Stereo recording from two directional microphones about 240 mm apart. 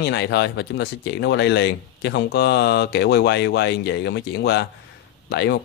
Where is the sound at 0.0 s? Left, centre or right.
Left.